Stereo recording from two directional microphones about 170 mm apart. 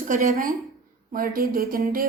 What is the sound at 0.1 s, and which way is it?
Speech, 50° right (ahead or behind).